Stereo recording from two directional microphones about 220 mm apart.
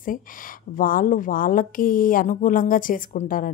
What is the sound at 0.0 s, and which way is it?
Speech, 40° left (ahead or behind).